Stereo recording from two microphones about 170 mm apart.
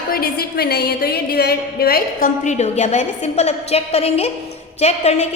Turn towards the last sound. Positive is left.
turn(degrees=40)  # may be behind; listen again after turning